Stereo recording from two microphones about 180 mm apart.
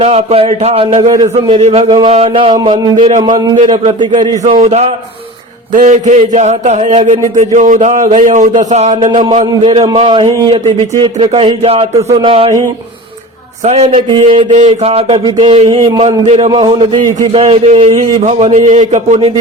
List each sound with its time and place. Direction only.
0.0 s a man's voice: 35° right (ahead or behind)
4.5 s a man's voice: 40° right (ahead or behind)
9.8 s a man's voice: 25° right (ahead or behind)
13.7 s speech: 35° right (ahead or behind)
14.5 s a man's voice: 40° right (ahead or behind)
16.5 s a man's voice: 25° right (ahead or behind); by 19.3 s 40° right (ahead or behind)